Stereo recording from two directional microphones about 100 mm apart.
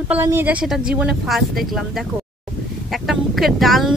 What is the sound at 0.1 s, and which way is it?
Speech, 20° right (ahead or behind).